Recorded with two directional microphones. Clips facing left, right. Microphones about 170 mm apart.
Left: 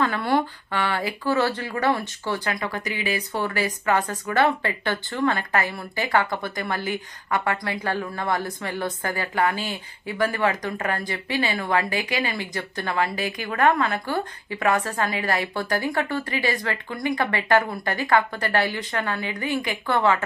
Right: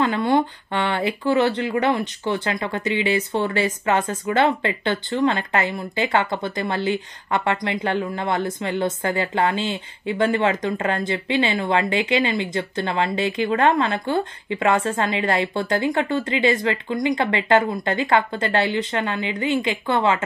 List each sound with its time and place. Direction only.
0.0 s speech: 20° right (ahead or behind)